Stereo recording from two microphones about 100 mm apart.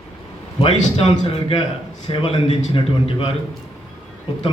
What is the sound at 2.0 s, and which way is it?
A man's voice, 55° left (ahead or behind).